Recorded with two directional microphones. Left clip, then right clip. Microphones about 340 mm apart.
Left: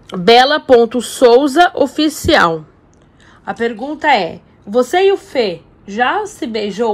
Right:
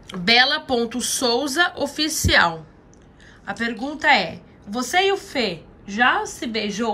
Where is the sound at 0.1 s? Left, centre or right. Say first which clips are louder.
Left 8 dB; centre.